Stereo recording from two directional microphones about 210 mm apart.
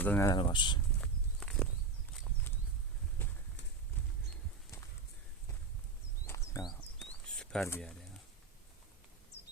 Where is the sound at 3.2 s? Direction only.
10° left (ahead or behind).